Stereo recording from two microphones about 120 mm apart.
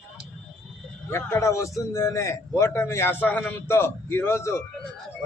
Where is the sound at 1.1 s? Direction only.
25° left (ahead or behind).